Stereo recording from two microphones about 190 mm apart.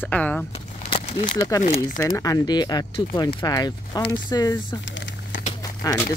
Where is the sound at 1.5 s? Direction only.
20° left (ahead or behind).